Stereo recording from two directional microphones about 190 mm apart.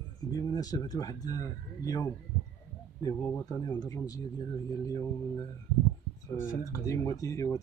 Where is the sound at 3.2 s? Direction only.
15° left (ahead or behind).